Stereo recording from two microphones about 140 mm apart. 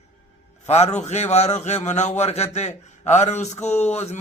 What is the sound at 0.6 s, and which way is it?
A man's voice, 50° left (ahead or behind).